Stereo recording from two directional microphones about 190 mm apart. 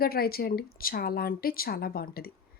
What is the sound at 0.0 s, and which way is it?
Speech, 50° left (ahead or behind).